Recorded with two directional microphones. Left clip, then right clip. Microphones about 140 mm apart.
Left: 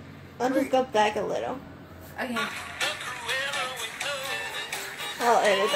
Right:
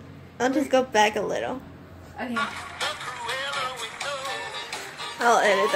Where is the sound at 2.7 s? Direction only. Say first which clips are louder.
Even; 25° right (ahead or behind).